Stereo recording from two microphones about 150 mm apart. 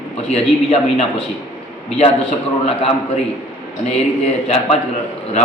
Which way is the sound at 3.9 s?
45° left (ahead or behind).